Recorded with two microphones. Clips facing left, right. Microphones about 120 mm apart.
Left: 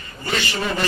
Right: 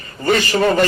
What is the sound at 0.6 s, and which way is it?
Speech, 55° right (ahead or behind).